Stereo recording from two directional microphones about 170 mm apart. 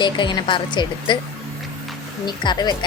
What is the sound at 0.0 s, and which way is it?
Speech, 25° left (ahead or behind).